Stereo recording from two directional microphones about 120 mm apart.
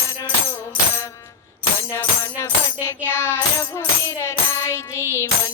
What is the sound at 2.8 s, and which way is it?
Music, 20° left (ahead or behind).